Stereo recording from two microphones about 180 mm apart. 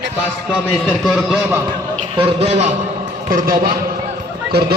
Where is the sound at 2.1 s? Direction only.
35° right (ahead or behind).